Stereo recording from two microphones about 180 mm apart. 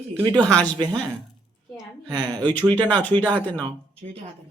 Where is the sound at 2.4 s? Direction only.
10° left (ahead or behind).